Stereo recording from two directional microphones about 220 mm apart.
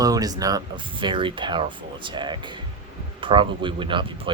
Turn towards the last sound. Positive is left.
turn(degrees=-20)  # may be behind; listen again after turning